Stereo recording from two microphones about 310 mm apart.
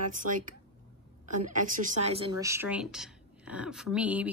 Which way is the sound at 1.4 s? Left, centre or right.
Right.